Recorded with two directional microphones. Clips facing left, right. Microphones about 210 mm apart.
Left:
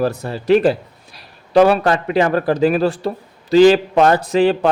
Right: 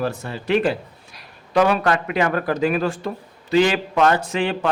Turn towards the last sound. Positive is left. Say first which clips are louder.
# left 8 dB
turn(degrees=35)  # may be behind; listen again after turning